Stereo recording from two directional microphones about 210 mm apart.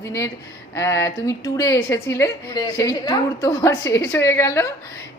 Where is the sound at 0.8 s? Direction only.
15° left (ahead or behind).